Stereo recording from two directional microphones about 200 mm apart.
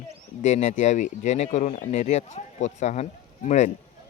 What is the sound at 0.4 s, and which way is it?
Speech, 35° left (ahead or behind).